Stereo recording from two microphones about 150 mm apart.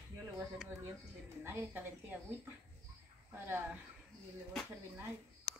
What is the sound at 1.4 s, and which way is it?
Speech, 15° right (ahead or behind).